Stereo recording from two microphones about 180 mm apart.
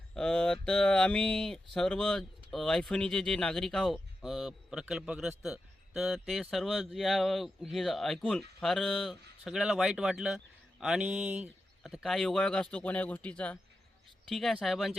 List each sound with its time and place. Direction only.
0.1 s speech: 5° left (ahead or behind)